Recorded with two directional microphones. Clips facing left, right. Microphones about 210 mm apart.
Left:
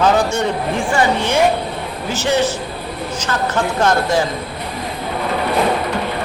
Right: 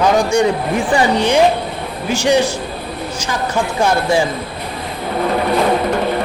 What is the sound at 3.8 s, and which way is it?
Speech, 10° right (ahead or behind).